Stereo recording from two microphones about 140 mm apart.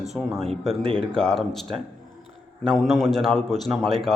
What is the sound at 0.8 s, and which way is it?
Speech, 40° right (ahead or behind).